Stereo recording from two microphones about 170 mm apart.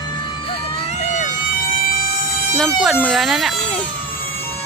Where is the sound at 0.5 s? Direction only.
40° left (ahead or behind).